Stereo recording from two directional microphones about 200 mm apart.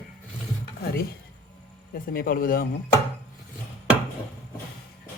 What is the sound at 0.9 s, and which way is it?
Speech, 50° left (ahead or behind).